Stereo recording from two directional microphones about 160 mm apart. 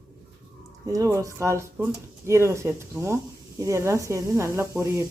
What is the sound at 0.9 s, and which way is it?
Speech, 20° right (ahead or behind).